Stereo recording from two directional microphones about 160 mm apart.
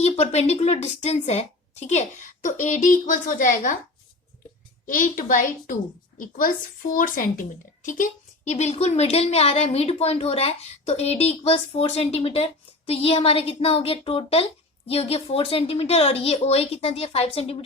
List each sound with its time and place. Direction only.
0.0 s speech: 40° left (ahead or behind)
4.9 s a woman's voice: 60° left (ahead or behind); by 17.6 s 35° left (ahead or behind)